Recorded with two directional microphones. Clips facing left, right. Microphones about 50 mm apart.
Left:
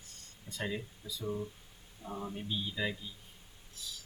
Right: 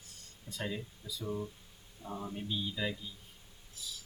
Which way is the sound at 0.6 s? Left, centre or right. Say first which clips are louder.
Left 1 dB; centre.